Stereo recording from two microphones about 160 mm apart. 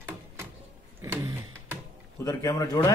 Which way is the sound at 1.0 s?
15° right (ahead or behind).